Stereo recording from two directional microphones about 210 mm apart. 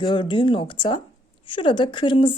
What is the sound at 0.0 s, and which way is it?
Speech, 20° left (ahead or behind).